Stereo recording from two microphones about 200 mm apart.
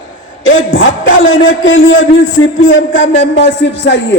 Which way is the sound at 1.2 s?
75° left (ahead or behind).